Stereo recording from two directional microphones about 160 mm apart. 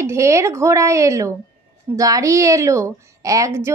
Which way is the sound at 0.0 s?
20° right (ahead or behind).